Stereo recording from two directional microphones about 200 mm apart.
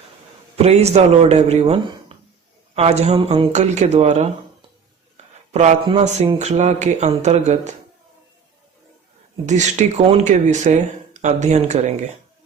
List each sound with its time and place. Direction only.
0.5 s speech: 30° right (ahead or behind)
9.5 s speech: 35° right (ahead or behind)